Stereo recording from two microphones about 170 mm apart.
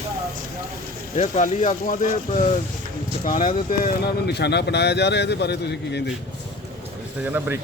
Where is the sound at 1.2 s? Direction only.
45° left (ahead or behind); by 6.0 s 80° left.